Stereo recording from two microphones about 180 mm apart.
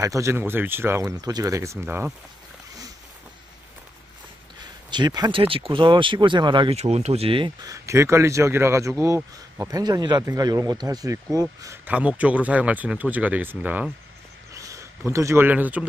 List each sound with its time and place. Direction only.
0.0 s speech: 15° right (ahead or behind)
4.9 s speech: 25° right (ahead or behind)
14.5 s a sound: 15° right (ahead or behind)
15.1 s speech: 15° right (ahead or behind)